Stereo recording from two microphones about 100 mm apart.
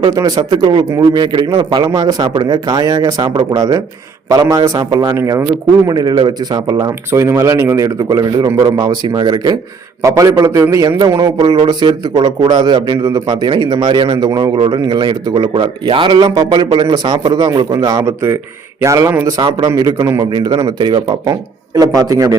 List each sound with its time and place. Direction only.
0.1 s a man's voice: 40° right (ahead or behind)
5.9 s a man's voice: 40° right (ahead or behind)
7.1 s a man's voice: 30° right (ahead or behind)
10.8 s a man's voice: 45° right (ahead or behind)
19.4 s a man's voice: 50° right (ahead or behind)
19.6 s a man's voice: 40° right (ahead or behind)
20.3 s a man's voice: 45° right (ahead or behind)
21.8 s a man's voice: 40° right (ahead or behind)